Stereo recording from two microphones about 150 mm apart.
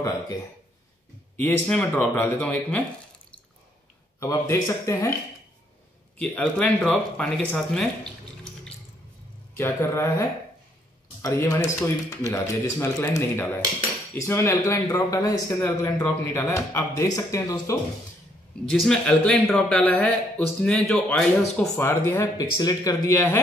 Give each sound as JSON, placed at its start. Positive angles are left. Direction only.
{"t": 1.3, "sound": "speech", "side_deg": 10}
{"t": 4.2, "sound": "speech", "side_deg": 20}
{"t": 6.1, "sound": "speech", "side_deg": 10}
{"t": 9.5, "sound": "speech", "side_deg": 15}
{"t": 11.2, "sound": "speech", "side_deg": 20}
{"t": 18.7, "sound": "speech", "side_deg": 5}